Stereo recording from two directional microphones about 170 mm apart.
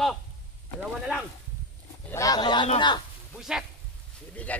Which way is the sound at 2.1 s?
20° left (ahead or behind).